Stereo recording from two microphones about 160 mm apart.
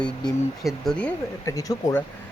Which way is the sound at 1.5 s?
20° left (ahead or behind).